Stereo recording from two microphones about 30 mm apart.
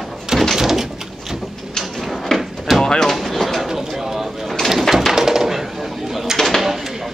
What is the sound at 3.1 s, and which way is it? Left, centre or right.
Bird, centre.